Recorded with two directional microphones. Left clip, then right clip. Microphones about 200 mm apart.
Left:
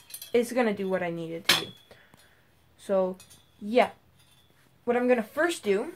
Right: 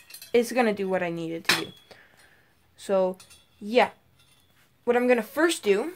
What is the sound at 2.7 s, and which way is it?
Speech, 45° right (ahead or behind).